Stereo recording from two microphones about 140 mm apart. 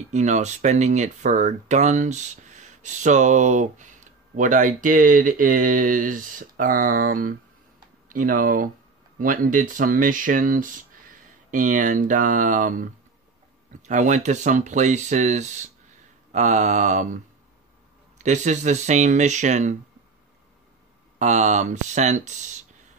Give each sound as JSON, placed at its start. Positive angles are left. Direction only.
{"t": 0.1, "sound": "speech", "side_deg": -55}
{"t": 21.2, "sound": "speech", "side_deg": -60}